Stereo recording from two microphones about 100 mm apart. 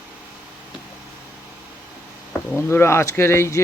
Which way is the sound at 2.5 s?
25° left (ahead or behind).